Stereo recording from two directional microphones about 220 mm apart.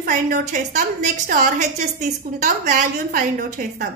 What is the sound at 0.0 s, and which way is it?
A woman's voice, 40° right (ahead or behind).